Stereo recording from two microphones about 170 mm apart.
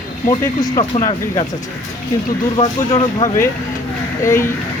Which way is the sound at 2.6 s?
30° left (ahead or behind).